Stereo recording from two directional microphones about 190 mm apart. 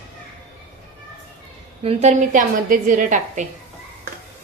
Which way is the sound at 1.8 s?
35° right (ahead or behind).